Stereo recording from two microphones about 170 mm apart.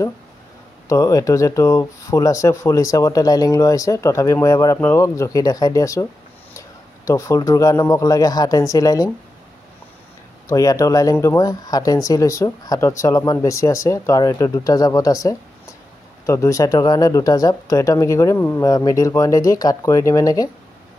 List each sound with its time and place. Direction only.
0.8 s speech: 20° left (ahead or behind)
7.1 s speech: 20° left (ahead or behind)
10.5 s speech: 20° left (ahead or behind)